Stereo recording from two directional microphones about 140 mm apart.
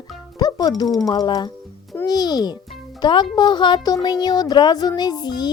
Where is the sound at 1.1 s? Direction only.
30° left (ahead or behind).